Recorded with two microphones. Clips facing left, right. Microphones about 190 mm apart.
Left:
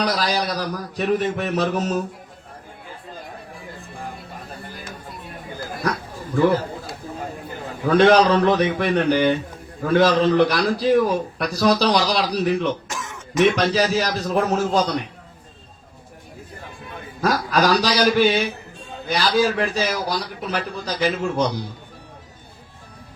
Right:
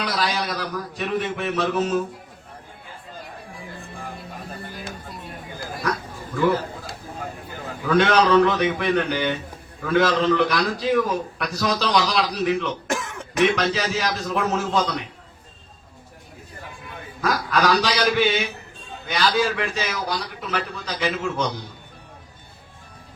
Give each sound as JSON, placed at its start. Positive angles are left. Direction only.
{"t": 0.0, "sound": "a man's voice", "side_deg": 40}
{"t": 7.9, "sound": "a man's voice", "side_deg": 35}
{"t": 12.9, "sound": "throat clearing", "side_deg": -60}
{"t": 13.7, "sound": "a man's voice", "side_deg": 40}
{"t": 17.2, "sound": "a man's voice", "side_deg": 35}